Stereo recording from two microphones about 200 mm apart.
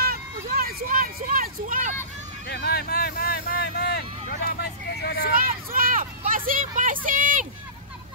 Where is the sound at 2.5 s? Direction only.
50° left (ahead or behind).